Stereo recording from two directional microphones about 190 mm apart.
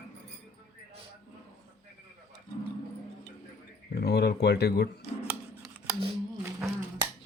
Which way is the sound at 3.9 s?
60° left (ahead or behind).